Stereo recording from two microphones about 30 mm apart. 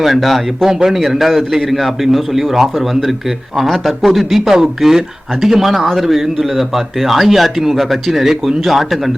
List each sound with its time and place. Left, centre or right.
0.0 s speech: centre
0.7 s speech: centre